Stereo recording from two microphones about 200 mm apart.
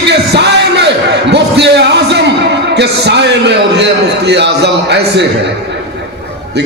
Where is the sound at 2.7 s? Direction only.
55° right (ahead or behind).